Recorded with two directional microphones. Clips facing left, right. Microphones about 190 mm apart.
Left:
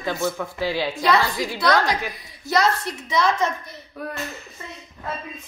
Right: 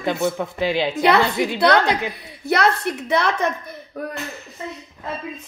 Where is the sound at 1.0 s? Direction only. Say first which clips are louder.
Right 4 dB; 60° right (ahead or behind).